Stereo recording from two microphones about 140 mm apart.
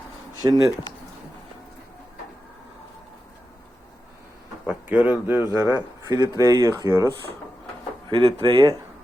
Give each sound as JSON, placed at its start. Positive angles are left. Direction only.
{"t": 0.4, "sound": "speech", "side_deg": -25}
{"t": 4.6, "sound": "speech", "side_deg": -10}
{"t": 8.1, "sound": "speech", "side_deg": -40}